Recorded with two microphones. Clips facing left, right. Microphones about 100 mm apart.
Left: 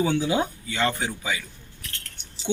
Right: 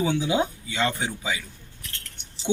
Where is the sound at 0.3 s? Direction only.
15° right (ahead or behind).